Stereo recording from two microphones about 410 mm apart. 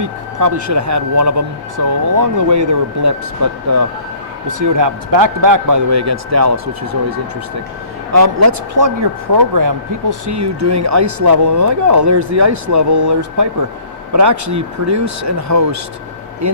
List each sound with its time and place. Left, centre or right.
0.0 s speech: right
8.1 s speech: right